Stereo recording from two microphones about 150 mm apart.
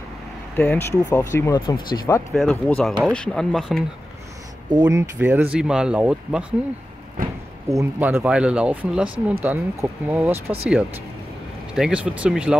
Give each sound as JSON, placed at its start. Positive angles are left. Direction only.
{"t": 0.6, "sound": "speech", "side_deg": 15}
{"t": 2.3, "sound": "speech", "side_deg": 0}
{"t": 4.6, "sound": "speech", "side_deg": -25}
{"t": 5.2, "sound": "speech", "side_deg": -10}
{"t": 7.2, "sound": "a sound", "side_deg": -70}
{"t": 7.6, "sound": "speech", "side_deg": -15}
{"t": 11.7, "sound": "speech", "side_deg": -5}